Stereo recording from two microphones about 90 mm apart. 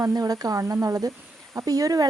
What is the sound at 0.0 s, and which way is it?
A woman's voice, 40° right (ahead or behind).